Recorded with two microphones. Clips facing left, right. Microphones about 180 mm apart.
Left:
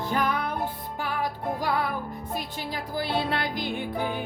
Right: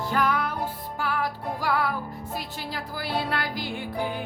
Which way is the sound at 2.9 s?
20° left (ahead or behind).